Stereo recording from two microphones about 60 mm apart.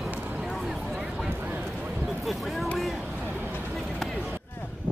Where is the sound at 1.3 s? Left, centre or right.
Right.